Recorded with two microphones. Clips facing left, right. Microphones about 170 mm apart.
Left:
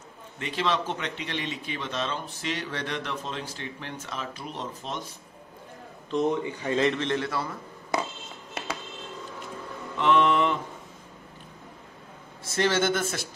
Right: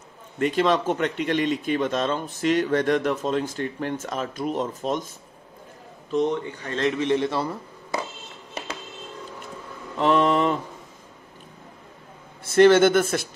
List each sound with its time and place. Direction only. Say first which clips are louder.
0.4 s speech: right 7 dB; 50° right (ahead or behind)
6.0 s a man's voice: right 2 dB; centre (ahead or behind)
6.4 s a man's voice: left 3 dB; 10° left (ahead or behind)
7.0 s a man's voice: right 6 dB; 15° right (ahead or behind)
9.9 s mantra: right 2 dB; 40° right (ahead or behind)
12.4 s a man's voice: right 10 dB; 55° right (ahead or behind)